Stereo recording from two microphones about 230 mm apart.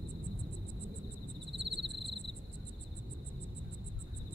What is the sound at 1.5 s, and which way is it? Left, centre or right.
Cricket, right.